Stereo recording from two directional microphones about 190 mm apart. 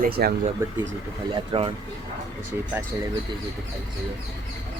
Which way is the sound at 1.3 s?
25° right (ahead or behind).